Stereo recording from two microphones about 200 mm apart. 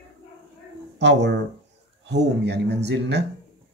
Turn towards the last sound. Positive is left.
turn(degrees=-60)  # may be behind; listen again after turning